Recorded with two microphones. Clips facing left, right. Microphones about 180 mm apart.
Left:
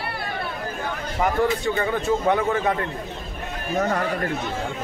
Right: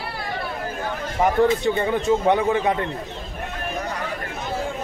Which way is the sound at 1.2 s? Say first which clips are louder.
Right 3 dB; 20° right (ahead or behind).